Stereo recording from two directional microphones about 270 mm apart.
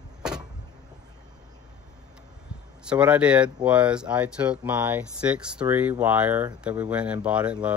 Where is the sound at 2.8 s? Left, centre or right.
Centre.